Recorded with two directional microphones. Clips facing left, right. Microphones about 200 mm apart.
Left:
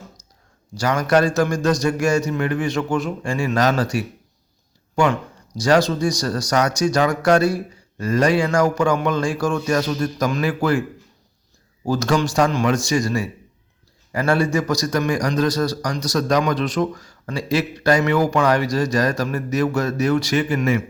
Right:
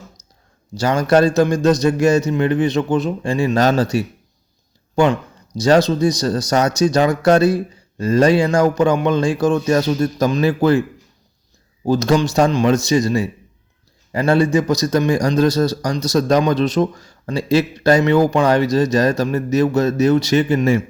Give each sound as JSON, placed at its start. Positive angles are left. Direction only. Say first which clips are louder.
{"t": 0.7, "sound": "a man's voice", "louder": "right 3 dB", "side_deg": -25}
{"t": 5.5, "sound": "a man's voice", "louder": "right 3 dB", "side_deg": -20}
{"t": 11.9, "sound": "a man's voice", "louder": "right 4 dB", "side_deg": -20}